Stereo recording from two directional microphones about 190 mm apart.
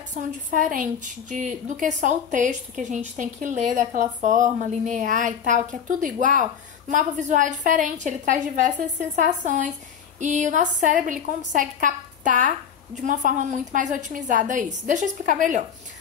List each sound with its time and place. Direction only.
0.1 s a woman's voice: 45° right (ahead or behind)